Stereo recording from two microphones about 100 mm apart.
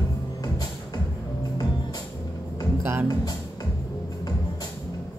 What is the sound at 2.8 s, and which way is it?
Speech, 20° right (ahead or behind).